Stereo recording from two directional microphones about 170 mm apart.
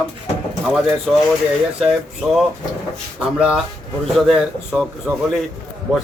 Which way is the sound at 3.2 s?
5° right (ahead or behind).